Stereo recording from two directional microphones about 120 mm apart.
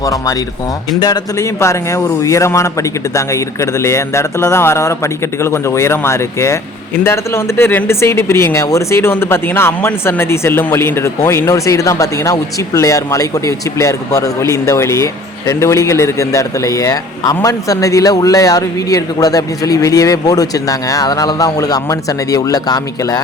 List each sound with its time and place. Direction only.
0.0 s speech: 30° left (ahead or behind)